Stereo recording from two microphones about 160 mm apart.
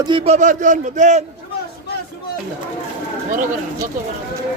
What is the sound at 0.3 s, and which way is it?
Speech, 50° right (ahead or behind).